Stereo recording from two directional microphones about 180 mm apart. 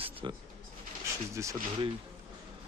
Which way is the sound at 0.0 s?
30° right (ahead or behind).